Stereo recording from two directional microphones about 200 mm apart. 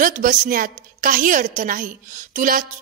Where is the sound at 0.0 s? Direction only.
40° right (ahead or behind).